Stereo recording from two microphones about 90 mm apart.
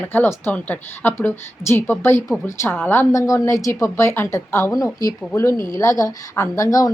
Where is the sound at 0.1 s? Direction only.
25° left (ahead or behind).